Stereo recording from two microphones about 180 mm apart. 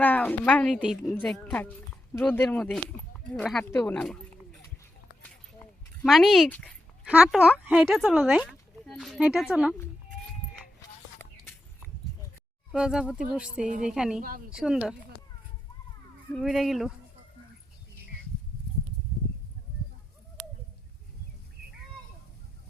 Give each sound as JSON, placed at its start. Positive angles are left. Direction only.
{"t": 0.0, "sound": "speech", "side_deg": 10}
{"t": 6.1, "sound": "speech", "side_deg": 0}
{"t": 7.0, "sound": "speech", "side_deg": -5}
{"t": 11.2, "sound": "a sound", "side_deg": 10}
{"t": 12.7, "sound": "speech", "side_deg": -5}
{"t": 14.2, "sound": "speech", "side_deg": -50}
{"t": 14.5, "sound": "speech", "side_deg": -5}
{"t": 16.3, "sound": "speech", "side_deg": 0}